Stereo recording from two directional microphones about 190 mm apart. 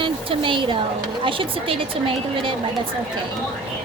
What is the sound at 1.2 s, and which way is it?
A woman's voice, 25° right (ahead or behind).